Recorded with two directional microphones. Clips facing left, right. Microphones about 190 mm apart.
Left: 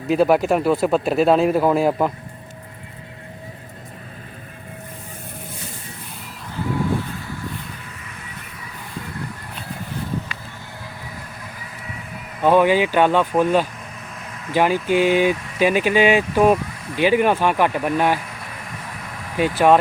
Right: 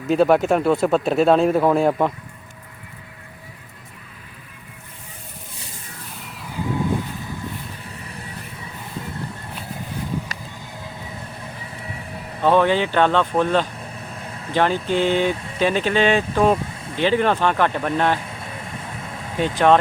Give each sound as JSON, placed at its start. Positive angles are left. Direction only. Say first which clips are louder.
{"t": 0.1, "sound": "speech", "louder": "even", "side_deg": 5}
{"t": 6.6, "sound": "vehicle", "louder": "left 1 dB", "side_deg": -20}
{"t": 11.9, "sound": "vehicle", "louder": "even", "side_deg": -30}
{"t": 12.4, "sound": "speech", "louder": "left 2 dB", "side_deg": 10}
{"t": 14.3, "sound": "vehicle", "louder": "right 1 dB", "side_deg": -30}
{"t": 14.5, "sound": "speech", "louder": "left 2 dB", "side_deg": 10}
{"t": 16.6, "sound": "a sound", "louder": "even", "side_deg": -25}
{"t": 17.0, "sound": "speech", "louder": "left 2 dB", "side_deg": 10}
{"t": 18.3, "sound": "vehicle", "louder": "right 2 dB", "side_deg": -25}
{"t": 19.5, "sound": "speech", "louder": "left 1 dB", "side_deg": 5}